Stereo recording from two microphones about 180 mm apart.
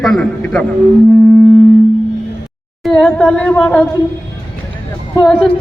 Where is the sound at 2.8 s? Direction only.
5° left (ahead or behind).